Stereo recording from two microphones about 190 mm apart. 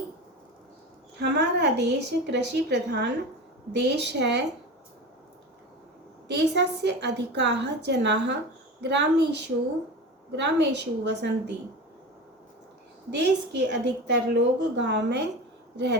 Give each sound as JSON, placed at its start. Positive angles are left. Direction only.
{"t": 1.2, "sound": "a woman's voice", "side_deg": -65}
{"t": 6.2, "sound": "a woman's voice", "side_deg": -65}
{"t": 10.3, "sound": "a woman's voice", "side_deg": -65}
{"t": 13.1, "sound": "a woman's voice", "side_deg": -65}